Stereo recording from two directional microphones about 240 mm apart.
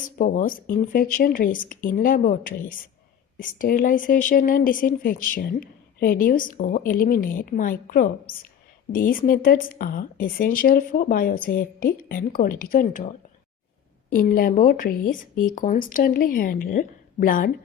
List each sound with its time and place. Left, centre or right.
0.2 s speech: left
14.1 s speech: left